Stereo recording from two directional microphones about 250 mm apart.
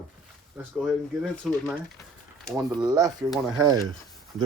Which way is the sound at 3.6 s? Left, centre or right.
Centre.